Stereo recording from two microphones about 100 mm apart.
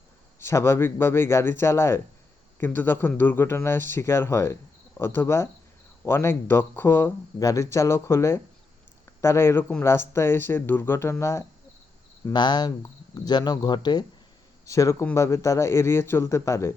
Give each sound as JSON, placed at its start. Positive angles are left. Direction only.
{"t": 0.3, "sound": "speech", "side_deg": 25}
{"t": 7.3, "sound": "speech", "side_deg": 35}
{"t": 12.3, "sound": "speech", "side_deg": 45}
{"t": 14.7, "sound": "speech", "side_deg": 30}